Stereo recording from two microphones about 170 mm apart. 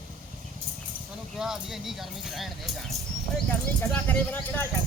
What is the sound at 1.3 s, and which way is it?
Speech, 5° right (ahead or behind).